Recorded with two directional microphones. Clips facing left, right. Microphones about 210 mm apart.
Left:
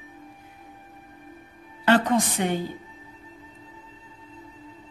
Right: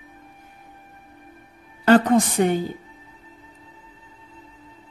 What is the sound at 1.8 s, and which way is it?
Speech, 45° right (ahead or behind).